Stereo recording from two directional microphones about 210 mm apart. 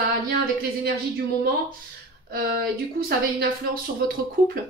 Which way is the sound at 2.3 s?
45° right (ahead or behind).